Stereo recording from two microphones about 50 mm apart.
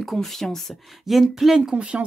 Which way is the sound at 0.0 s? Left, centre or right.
Centre.